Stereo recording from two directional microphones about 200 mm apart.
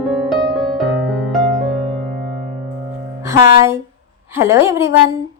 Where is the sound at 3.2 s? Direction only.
15° right (ahead or behind).